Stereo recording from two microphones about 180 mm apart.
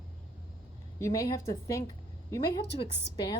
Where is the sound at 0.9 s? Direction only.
20° left (ahead or behind).